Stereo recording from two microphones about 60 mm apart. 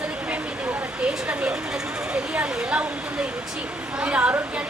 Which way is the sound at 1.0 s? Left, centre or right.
Centre.